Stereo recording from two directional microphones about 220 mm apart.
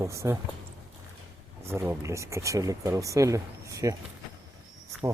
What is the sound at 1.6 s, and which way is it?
Speech, 10° right (ahead or behind).